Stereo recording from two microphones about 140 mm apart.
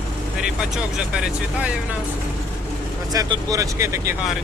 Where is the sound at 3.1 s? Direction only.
25° right (ahead or behind).